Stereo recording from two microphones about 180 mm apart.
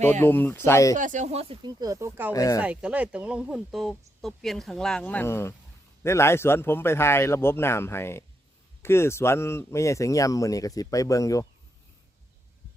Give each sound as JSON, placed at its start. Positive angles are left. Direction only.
{"t": 0.0, "sound": "speech", "side_deg": 10}
{"t": 0.9, "sound": "speech", "side_deg": -45}
{"t": 1.8, "sound": "speech", "side_deg": -15}
{"t": 2.3, "sound": "speech", "side_deg": 20}
{"t": 2.6, "sound": "speech", "side_deg": -5}